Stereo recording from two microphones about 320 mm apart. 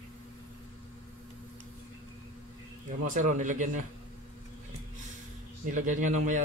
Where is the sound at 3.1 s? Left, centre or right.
Right.